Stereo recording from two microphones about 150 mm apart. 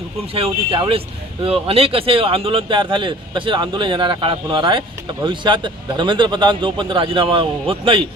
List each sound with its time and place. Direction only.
0.3 s speech: 40° right (ahead or behind)